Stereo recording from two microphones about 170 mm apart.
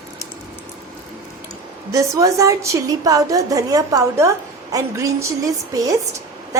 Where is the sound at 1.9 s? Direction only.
20° right (ahead or behind).